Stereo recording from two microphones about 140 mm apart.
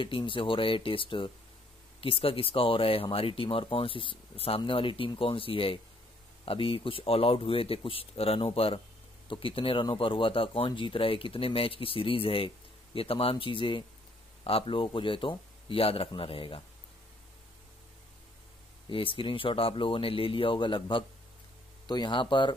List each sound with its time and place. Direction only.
0.0 s speech: 35° left (ahead or behind)
18.9 s speech: 35° left (ahead or behind)